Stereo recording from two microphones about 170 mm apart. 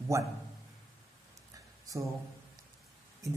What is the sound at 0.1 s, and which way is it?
Speech, 20° right (ahead or behind).